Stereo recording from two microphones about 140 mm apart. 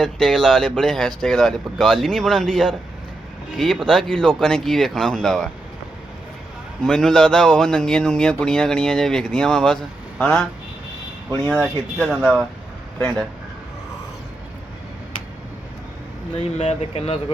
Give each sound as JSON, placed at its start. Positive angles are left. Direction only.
{"t": 0.0, "sound": "a man's voice", "side_deg": 0}
{"t": 6.8, "sound": "a man's voice", "side_deg": 5}
{"t": 16.4, "sound": "speech", "side_deg": 50}